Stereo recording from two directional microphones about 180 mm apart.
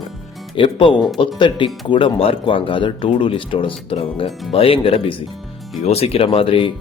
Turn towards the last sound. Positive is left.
turn(degrees=30)  # may be behind; listen again after turning